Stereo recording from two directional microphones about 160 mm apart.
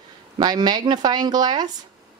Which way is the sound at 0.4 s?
25° right (ahead or behind).